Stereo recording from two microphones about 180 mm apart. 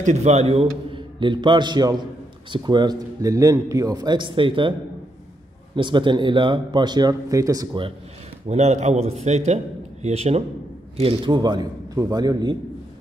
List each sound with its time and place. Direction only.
0.0 s a man's voice: 40° right (ahead or behind)
5.8 s a man's voice: 25° right (ahead or behind)
8.5 s a man's voice: 35° right (ahead or behind); by 12.5 s 20° right (ahead or behind)